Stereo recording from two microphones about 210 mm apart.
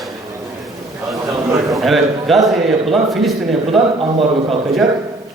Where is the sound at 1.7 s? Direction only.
Centre (ahead or behind).